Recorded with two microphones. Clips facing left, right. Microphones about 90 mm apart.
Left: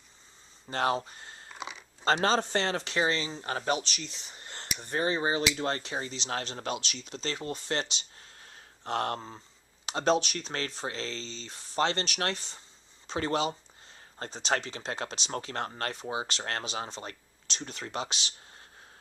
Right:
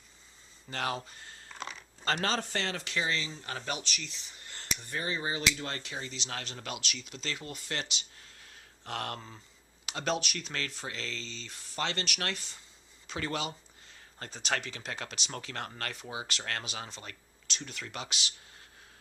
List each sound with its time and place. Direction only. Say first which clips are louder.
0.7 s speech: left 6 dB; 30° left (ahead or behind)
1.5 s a sound: left 1 dB; 5° left (ahead or behind)
2.0 s speech: left 6 dB; 30° left (ahead or behind)
4.4 s whispering: left 4 dB; 30° left (ahead or behind)
4.8 s speech: left 7 dB; 30° left (ahead or behind)